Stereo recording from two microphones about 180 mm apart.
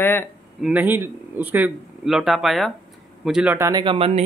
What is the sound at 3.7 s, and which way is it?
Speech, 25° right (ahead or behind).